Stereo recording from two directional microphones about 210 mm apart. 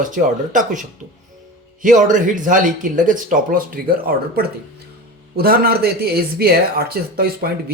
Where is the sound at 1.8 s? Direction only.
40° right (ahead or behind).